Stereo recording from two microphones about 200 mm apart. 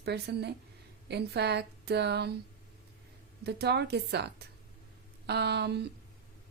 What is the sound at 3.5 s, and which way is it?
Speech, 55° right (ahead or behind).